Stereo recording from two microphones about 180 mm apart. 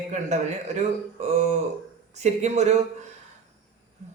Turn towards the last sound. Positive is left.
turn(degrees=-40)  # may be behind; listen again after turning